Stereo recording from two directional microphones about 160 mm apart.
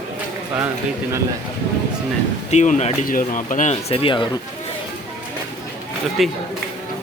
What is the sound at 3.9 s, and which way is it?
Speech, 35° left (ahead or behind).